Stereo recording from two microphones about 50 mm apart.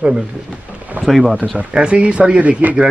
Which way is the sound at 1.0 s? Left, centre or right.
Centre.